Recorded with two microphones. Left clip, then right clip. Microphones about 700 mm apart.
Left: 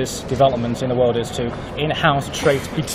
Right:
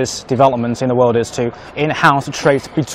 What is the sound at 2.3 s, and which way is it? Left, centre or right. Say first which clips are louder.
Speech: right 4 dB; right.